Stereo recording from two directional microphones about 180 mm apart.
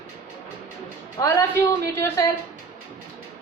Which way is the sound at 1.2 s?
20° left (ahead or behind).